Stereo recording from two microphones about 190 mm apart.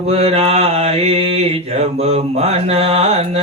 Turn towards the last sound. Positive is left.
turn(degrees=-30)  # may be behind; listen again after turning